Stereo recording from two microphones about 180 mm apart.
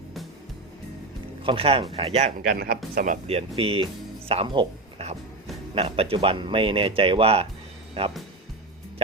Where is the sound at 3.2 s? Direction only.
35° right (ahead or behind).